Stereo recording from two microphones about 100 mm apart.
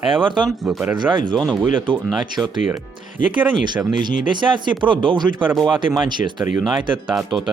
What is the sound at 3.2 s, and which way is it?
Speech, 55° right (ahead or behind).